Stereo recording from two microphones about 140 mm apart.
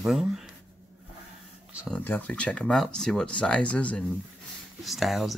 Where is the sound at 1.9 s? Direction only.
10° left (ahead or behind).